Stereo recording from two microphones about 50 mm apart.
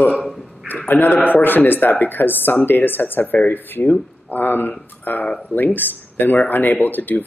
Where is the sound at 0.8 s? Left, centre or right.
Left.